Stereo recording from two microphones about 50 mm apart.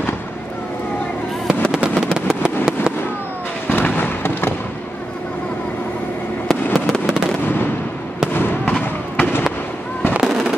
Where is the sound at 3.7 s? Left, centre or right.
Left.